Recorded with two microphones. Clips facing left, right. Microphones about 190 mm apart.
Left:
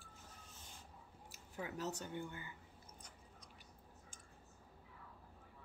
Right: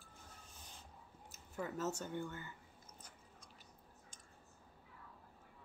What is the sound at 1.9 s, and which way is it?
Speech, 15° left (ahead or behind).